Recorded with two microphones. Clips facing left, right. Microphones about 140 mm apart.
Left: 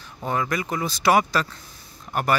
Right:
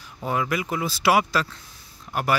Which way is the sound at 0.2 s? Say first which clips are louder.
Even; 10° right (ahead or behind).